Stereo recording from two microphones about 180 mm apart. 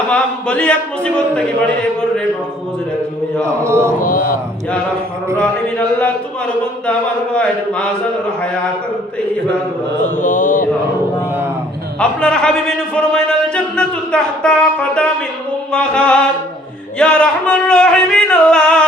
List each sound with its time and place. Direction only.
0.1 s a man's voice: 5° left (ahead or behind)
3.4 s a man's voice: 15° right (ahead or behind)
4.0 s mantra: 50° left (ahead or behind)
5.4 s speech: 10° left (ahead or behind)
10.0 s mantra: 45° left (ahead or behind)
11.9 s a man's voice: 5° left (ahead or behind)
17.0 s singing: 5° left (ahead or behind)